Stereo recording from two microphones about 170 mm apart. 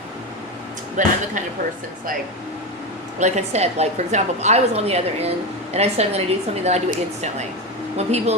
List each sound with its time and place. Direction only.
1.0 s speech: 45° right (ahead or behind)
3.2 s a woman's voice: 45° right (ahead or behind)